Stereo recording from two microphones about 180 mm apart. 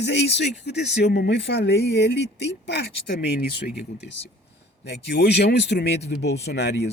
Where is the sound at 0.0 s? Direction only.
70° left (ahead or behind).